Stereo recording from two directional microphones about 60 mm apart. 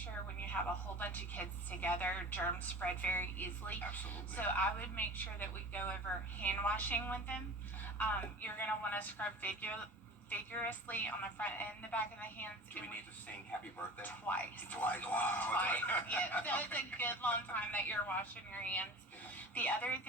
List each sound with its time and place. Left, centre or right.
0.5 s a woman's voice: left
14.0 s a woman's voice: left